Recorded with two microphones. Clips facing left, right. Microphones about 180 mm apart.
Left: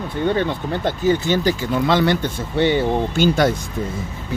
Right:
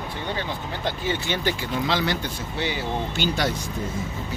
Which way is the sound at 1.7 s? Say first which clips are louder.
Left 9 dB; 55° left (ahead or behind).